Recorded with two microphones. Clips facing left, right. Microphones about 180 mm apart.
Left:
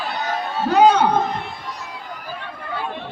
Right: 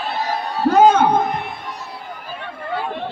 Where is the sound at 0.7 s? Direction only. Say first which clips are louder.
Right 1 dB; 50° right (ahead or behind).